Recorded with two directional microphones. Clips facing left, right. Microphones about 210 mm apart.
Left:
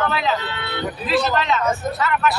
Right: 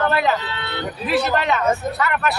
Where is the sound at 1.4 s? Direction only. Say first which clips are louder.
Right 1 dB; 60° right (ahead or behind).